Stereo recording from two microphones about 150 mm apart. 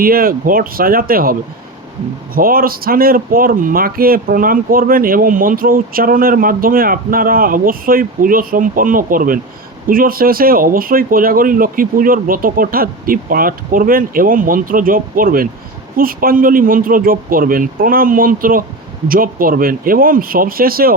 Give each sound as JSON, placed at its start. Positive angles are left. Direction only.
{"t": 0.0, "sound": "speech", "side_deg": -75}